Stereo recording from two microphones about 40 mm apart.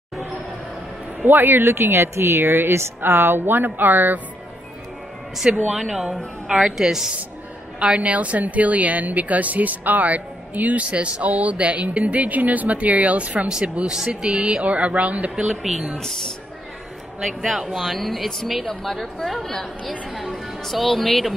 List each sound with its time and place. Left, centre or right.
1.2 s speech: right
5.4 s speech: right
5.8 s a woman's voice: centre
6.8 s a woman's voice: centre
7.8 s speech: right
8.1 s speech: right
13.8 s speech: centre
14.6 s speech: right
17.4 s speech: centre